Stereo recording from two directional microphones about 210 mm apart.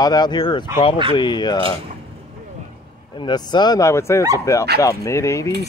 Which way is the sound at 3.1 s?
20° left (ahead or behind).